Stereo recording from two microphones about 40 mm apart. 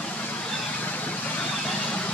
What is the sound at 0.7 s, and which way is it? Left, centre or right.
Vehicle, left.